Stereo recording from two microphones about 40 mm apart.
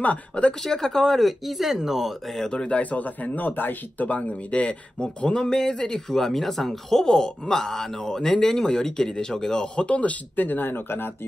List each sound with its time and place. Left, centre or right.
0.0 s speech: left
0.7 s speech: centre
2.5 s a man's voice: left
2.8 s speech: left; by 9.7 s centre
9.8 s speech: left
10.3 s speech: left